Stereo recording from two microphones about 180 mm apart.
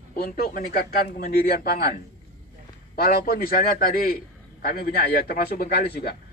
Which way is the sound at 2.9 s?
55° left (ahead or behind).